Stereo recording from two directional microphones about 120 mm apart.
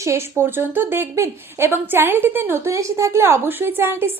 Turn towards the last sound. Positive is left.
turn(degrees=-20)  # may be behind; listen again after turning